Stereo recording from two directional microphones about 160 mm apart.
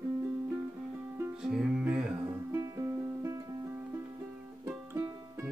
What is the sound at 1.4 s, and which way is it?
Music, 5° right (ahead or behind).